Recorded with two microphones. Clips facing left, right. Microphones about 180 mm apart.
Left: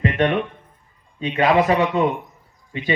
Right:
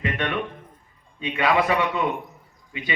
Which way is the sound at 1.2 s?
40° left (ahead or behind).